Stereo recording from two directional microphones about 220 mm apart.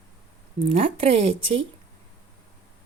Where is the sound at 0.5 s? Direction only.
25° right (ahead or behind).